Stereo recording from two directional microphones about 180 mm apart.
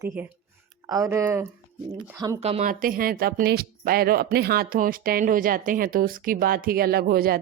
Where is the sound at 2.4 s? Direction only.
40° right (ahead or behind).